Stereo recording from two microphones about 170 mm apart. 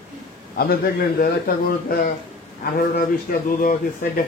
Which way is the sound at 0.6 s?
60° left (ahead or behind).